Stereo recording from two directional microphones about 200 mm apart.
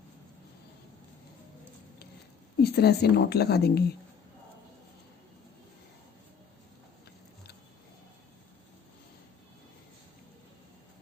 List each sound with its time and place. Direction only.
2.6 s speech: 50° left (ahead or behind)